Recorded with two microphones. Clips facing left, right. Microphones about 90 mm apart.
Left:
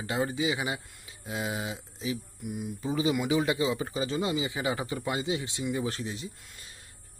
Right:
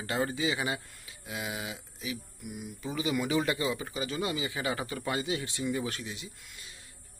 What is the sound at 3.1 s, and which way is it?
Speech, 15° left (ahead or behind).